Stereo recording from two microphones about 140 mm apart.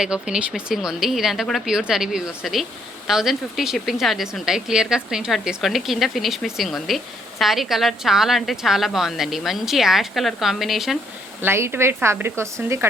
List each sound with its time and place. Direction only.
0.0 s a woman's voice: 5° right (ahead or behind)
11.4 s a woman's voice: 15° right (ahead or behind)